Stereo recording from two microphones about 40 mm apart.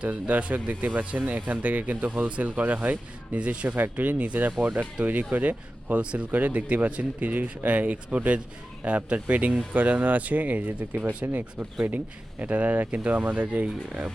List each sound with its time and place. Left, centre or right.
0.0 s speech: right
3.8 s speech: right
6.0 s speech: right
6.3 s speech: right
12.4 s speech: right